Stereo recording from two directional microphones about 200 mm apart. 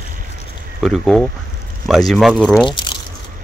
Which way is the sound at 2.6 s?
25° left (ahead or behind).